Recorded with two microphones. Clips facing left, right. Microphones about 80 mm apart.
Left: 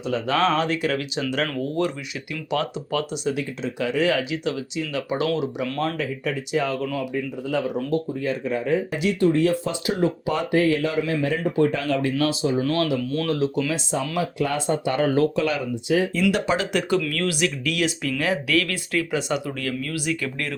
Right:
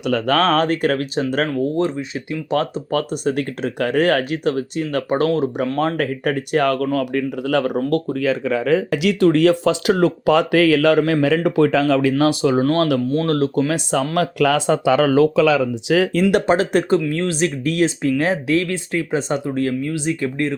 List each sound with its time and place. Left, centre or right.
0.0 s speech: right
0.3 s speech: right
1.5 s speech: right
6.0 s speech: right
12.2 s speech: right
12.6 s speech: right
13.0 s speech: right
13.3 s speech: right
14.3 s speech: right
15.6 s speech: right
16.3 s speech: right
17.0 s speech: right